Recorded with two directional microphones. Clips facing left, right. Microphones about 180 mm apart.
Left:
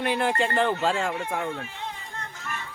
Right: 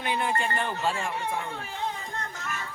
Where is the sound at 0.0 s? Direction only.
75° left (ahead or behind).